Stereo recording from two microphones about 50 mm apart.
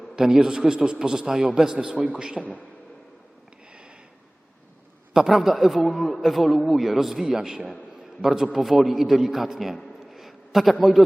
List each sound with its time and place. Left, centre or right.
0.2 s a man's voice: centre
5.1 s a man's voice: centre
10.1 s a sound: centre